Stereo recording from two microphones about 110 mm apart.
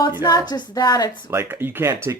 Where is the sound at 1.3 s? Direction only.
20° right (ahead or behind).